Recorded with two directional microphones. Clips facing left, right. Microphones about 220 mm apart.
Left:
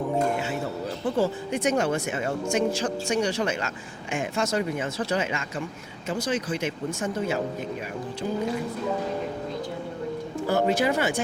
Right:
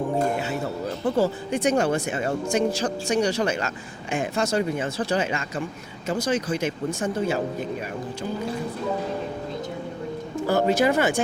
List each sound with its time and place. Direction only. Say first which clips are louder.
1.0 s speech: right 2 dB; 40° right (ahead or behind)
10.5 s speech: right 3 dB; 45° right (ahead or behind)